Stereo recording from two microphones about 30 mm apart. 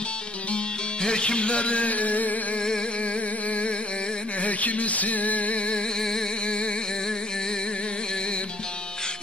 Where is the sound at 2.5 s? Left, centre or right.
Left.